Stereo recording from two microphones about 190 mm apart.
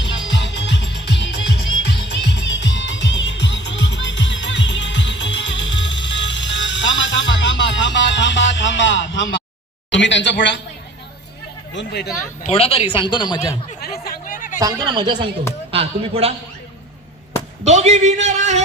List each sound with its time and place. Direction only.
0.0 s music: 75° left (ahead or behind)
9.9 s speech: 70° left (ahead or behind)
11.7 s speech: 70° left (ahead or behind)
12.1 s speech: 40° left (ahead or behind); by 13.6 s 20° left (ahead or behind)
13.8 s chatter: 55° left (ahead or behind)
14.6 s speech: 20° right (ahead or behind)
17.6 s a man's voice: 35° right (ahead or behind)